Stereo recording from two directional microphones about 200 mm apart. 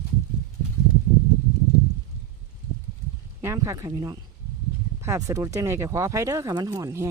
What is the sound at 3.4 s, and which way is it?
Speech, 15° right (ahead or behind).